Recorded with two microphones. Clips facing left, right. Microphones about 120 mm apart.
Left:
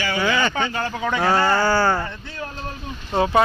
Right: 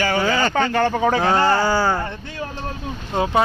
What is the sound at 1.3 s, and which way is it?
Speech, 20° right (ahead or behind).